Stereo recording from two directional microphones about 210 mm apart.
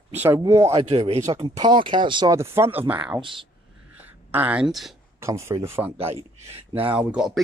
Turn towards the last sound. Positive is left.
turn(degrees=-5)  # may be behind; listen again after turning